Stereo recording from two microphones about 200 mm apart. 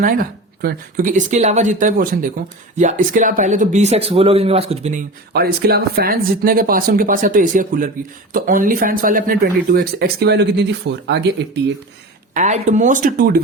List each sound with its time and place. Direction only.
0.0 s speech: 45° right (ahead or behind)
5.3 s speech: 50° right (ahead or behind)
12.3 s speech: 40° right (ahead or behind)